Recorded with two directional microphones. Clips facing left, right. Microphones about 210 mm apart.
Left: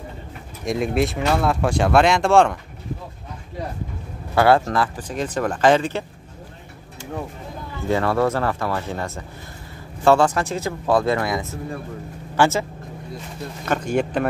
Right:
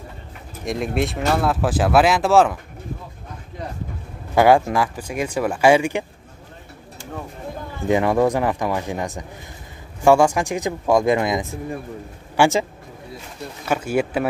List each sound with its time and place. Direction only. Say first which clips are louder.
0.7 s speech: left 2 dB; centre (ahead or behind)
4.4 s speech: right 2 dB; 15° right (ahead or behind)
7.9 s speech: right 2 dB; 15° right (ahead or behind)
13.7 s speech: right 1 dB; 5° right (ahead or behind)